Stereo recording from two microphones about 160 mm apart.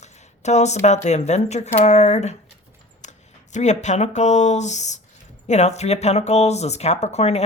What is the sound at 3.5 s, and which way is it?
Speech, 45° left (ahead or behind).